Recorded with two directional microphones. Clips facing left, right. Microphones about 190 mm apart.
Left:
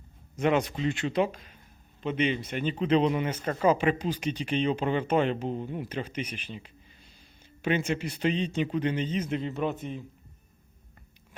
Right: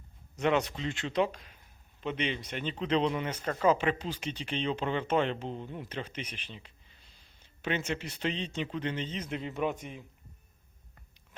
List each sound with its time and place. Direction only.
0.3 s a man's voice: 10° left (ahead or behind)
7.9 s speech: 10° left (ahead or behind)
9.4 s a man's voice: 10° right (ahead or behind)